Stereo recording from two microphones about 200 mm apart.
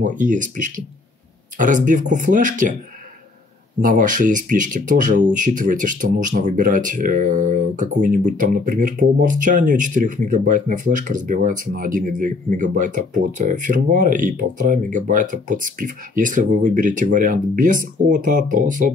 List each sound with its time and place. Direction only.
0.0 s speech: 40° right (ahead or behind)
3.8 s speech: 40° right (ahead or behind)